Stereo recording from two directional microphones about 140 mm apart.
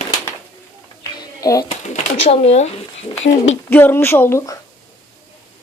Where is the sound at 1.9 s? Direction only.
50° left (ahead or behind).